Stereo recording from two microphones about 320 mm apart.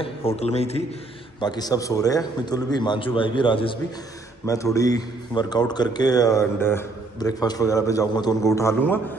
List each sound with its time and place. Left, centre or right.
0.0 s a man's voice: centre